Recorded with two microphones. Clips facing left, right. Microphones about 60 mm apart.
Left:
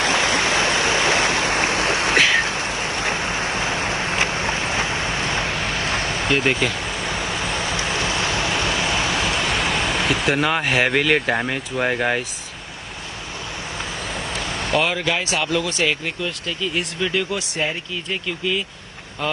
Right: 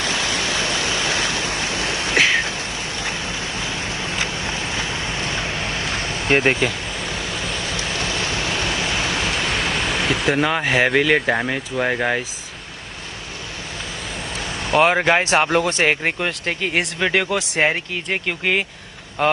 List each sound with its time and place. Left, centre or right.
0.0 s a sound: left
6.2 s speech: right
7.1 s waves: left
9.8 s vehicle: centre
10.6 s speech: right
11.2 s speech: centre
14.7 s speech: right
15.0 s speech: right
16.0 s speech: right